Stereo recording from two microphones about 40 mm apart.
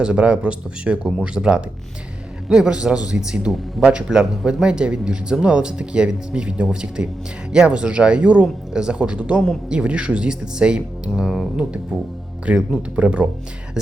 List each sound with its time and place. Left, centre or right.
0.0 s a man's voice: right
3.5 s a man's voice: centre
4.1 s speech: right
8.7 s speech: centre
9.0 s speech: right